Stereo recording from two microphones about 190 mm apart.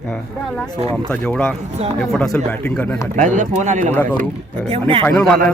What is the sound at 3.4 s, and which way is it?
Speech, 40° right (ahead or behind).